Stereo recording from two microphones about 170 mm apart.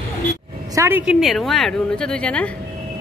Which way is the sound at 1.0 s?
Centre (ahead or behind).